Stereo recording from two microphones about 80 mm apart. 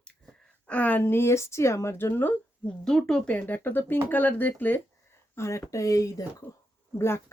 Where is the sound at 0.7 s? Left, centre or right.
Centre.